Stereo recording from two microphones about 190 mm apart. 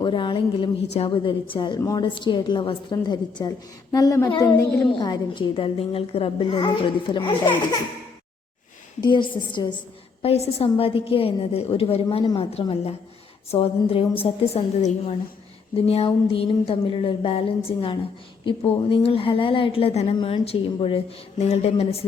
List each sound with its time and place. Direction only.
0.0 s a woman's voice: 25° left (ahead or behind)
9.0 s a woman's voice: 25° left (ahead or behind)